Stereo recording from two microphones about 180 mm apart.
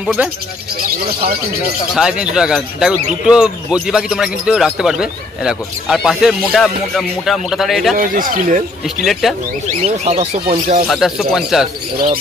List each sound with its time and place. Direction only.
0.0 s speech: 5° right (ahead or behind)
2.0 s speech: 5° right (ahead or behind)
8.0 s speech: 50° right (ahead or behind)
8.8 s speech: centre (ahead or behind)
9.8 s speech: 35° right (ahead or behind)
10.9 s speech: centre (ahead or behind)